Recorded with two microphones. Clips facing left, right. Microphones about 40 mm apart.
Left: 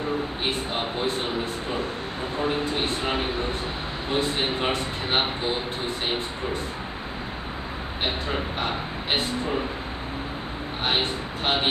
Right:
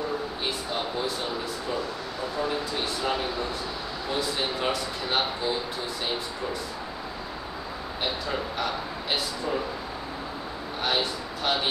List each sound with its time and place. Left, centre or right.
0.5 s a sound: left
2.3 s speech: left
8.0 s speech: left
10.8 s speech: left